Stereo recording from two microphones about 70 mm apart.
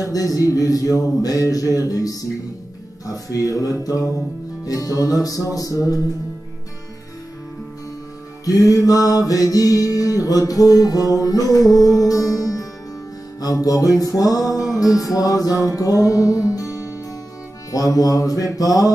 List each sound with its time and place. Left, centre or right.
0.0 s music: left
8.5 s music: left